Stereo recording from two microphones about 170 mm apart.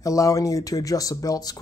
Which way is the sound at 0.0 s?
20° left (ahead or behind).